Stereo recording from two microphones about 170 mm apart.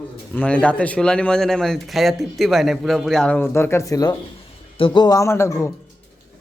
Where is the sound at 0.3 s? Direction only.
5° left (ahead or behind).